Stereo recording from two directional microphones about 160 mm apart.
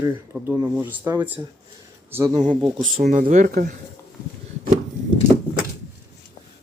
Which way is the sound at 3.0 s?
55° right (ahead or behind).